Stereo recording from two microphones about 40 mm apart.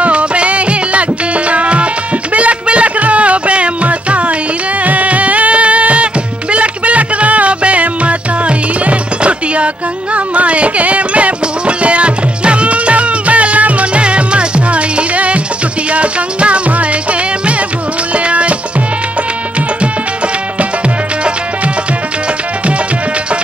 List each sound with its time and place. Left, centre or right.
0.0 s music: right
18.1 s music: right